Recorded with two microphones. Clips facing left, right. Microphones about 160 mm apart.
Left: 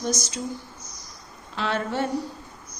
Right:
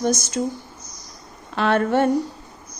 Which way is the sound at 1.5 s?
55° right (ahead or behind).